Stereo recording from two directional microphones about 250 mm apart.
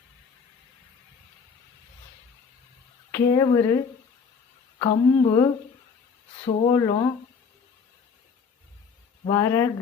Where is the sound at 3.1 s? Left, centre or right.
Centre.